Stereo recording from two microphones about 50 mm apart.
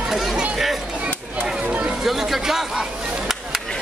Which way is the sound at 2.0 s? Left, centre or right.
Centre.